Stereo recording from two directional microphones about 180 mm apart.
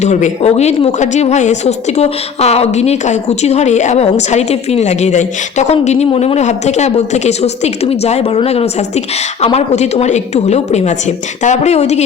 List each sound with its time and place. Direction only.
0.0 s a woman's voice: 40° left (ahead or behind)